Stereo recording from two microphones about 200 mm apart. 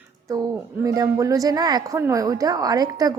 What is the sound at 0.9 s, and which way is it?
A woman's voice, 15° right (ahead or behind).